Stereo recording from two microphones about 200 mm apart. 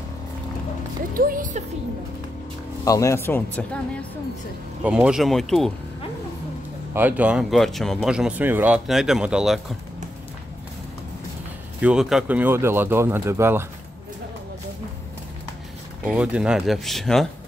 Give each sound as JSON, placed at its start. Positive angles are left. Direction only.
{"t": 1.1, "sound": "speech", "side_deg": -45}
{"t": 2.8, "sound": "speech", "side_deg": 15}
{"t": 4.8, "sound": "speech", "side_deg": -5}
{"t": 6.9, "sound": "speech", "side_deg": -10}
{"t": 11.8, "sound": "speech", "side_deg": -5}
{"t": 16.1, "sound": "speech", "side_deg": -5}